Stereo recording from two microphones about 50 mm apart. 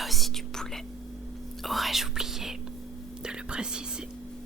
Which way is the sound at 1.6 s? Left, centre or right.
Centre.